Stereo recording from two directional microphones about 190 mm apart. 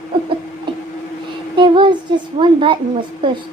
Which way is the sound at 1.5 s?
25° right (ahead or behind).